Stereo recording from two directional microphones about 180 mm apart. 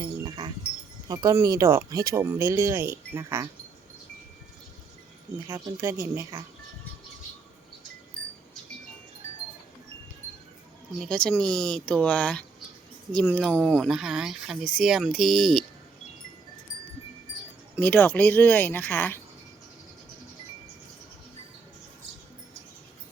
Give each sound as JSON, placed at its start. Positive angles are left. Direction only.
{"t": 0.0, "sound": "wind chime", "side_deg": -25}
{"t": 1.0, "sound": "speech", "side_deg": -20}
{"t": 5.5, "sound": "speech", "side_deg": -15}
{"t": 11.0, "sound": "speech", "side_deg": 5}
{"t": 17.7, "sound": "speech", "side_deg": 10}